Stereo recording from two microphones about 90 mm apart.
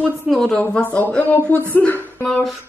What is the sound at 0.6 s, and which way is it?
Speech, 20° left (ahead or behind).